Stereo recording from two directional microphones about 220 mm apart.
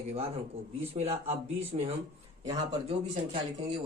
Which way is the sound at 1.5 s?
25° right (ahead or behind).